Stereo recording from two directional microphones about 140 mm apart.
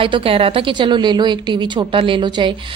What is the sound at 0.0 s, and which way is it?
A woman's voice, 40° right (ahead or behind).